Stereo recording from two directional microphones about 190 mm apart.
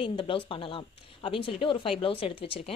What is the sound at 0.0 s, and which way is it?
Speech, 30° left (ahead or behind).